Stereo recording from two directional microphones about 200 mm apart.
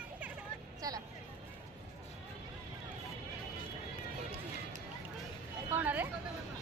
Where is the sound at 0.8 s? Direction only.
20° right (ahead or behind).